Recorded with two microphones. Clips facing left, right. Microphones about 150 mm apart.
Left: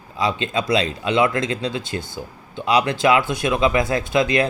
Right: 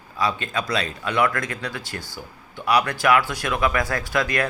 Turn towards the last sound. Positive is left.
turn(degrees=20)  # may be behind; listen again after turning